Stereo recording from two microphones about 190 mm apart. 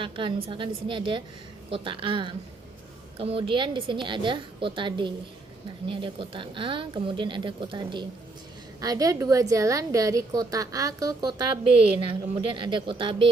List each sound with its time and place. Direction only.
0.0 s a woman's voice: 25° right (ahead or behind)